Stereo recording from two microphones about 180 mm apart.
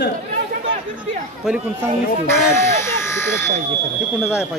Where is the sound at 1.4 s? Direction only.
Centre (ahead or behind).